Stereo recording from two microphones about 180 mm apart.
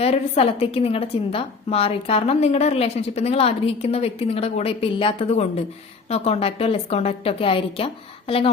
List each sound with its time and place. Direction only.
0.0 s a woman's voice: 35° left (ahead or behind)